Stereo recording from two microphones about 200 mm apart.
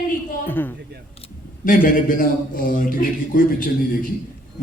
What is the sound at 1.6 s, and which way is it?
A man's voice, 45° left (ahead or behind).